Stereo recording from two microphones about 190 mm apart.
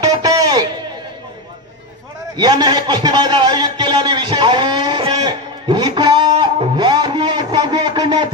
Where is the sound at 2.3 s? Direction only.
20° right (ahead or behind).